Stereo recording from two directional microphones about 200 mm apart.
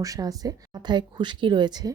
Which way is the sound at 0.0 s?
15° right (ahead or behind).